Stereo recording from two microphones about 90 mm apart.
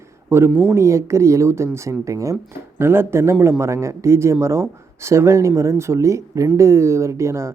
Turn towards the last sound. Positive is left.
turn(degrees=-30)  # may be behind; listen again after turning